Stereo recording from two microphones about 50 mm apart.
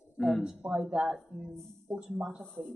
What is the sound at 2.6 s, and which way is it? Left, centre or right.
Speech, centre.